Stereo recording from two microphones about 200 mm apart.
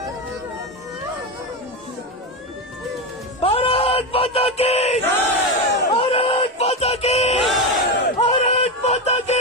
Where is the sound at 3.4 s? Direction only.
30° left (ahead or behind).